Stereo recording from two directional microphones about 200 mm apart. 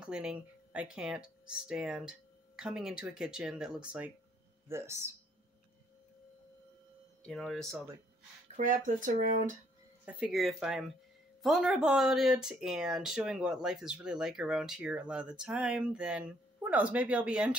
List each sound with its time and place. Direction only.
0.0 s speech: 5° right (ahead or behind)
7.2 s speech: centre (ahead or behind)
8.5 s speech: 40° right (ahead or behind)
10.2 s speech: centre (ahead or behind)